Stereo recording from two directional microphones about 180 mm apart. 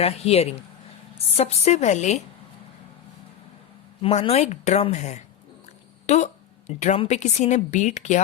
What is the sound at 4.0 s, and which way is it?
Speech, 35° left (ahead or behind).